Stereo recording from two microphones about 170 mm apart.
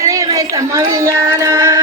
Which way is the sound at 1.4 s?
15° right (ahead or behind).